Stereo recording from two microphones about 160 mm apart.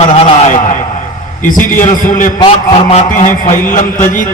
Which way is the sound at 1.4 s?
55° left (ahead or behind).